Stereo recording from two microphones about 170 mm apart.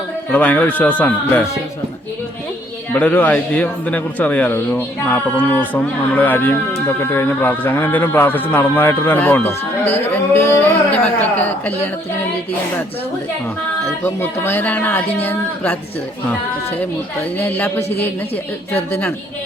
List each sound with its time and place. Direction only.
0.3 s speech: 10° left (ahead or behind)
2.9 s speech: 10° left (ahead or behind)
14.0 s speech: 10° left (ahead or behind)
17.3 s speech: 10° left (ahead or behind)